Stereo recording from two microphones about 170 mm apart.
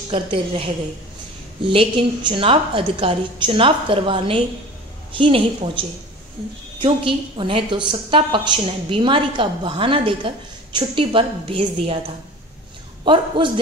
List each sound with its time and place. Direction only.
0.1 s a woman's voice: 30° right (ahead or behind)
13.0 s a woman's voice: 30° right (ahead or behind)